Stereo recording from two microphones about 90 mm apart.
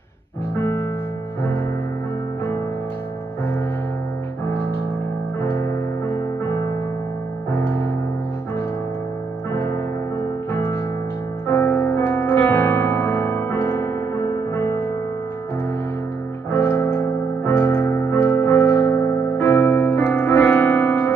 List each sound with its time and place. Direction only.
0.6 s music: 25° left (ahead or behind)
5.4 s music: 30° left (ahead or behind)
9.5 s music: 30° left (ahead or behind)
11.4 s music: 30° left (ahead or behind)
12.1 s music: 20° left (ahead or behind)
16.5 s music: 25° left (ahead or behind)
17.0 s keyboard: 20° left (ahead or behind)
17.7 s music: 25° left (ahead or behind)
18.7 s keyboard: 25° left (ahead or behind)
20.1 s music: 20° left (ahead or behind)